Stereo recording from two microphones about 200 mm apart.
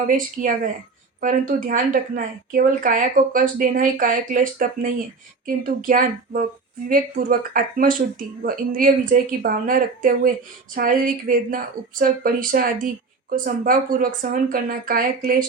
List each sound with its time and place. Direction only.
0.1 s a woman's voice: 45° right (ahead or behind)